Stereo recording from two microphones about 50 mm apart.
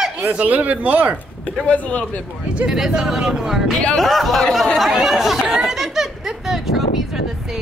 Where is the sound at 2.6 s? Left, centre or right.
Centre.